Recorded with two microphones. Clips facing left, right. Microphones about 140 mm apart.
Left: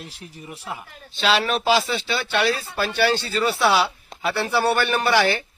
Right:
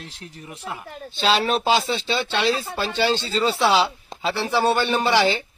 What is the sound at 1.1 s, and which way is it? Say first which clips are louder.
Speech: right 1 dB; 30° right (ahead or behind).